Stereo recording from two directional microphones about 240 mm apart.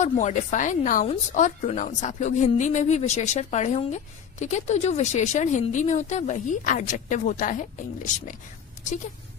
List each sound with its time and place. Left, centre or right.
0.0 s a woman's voice: left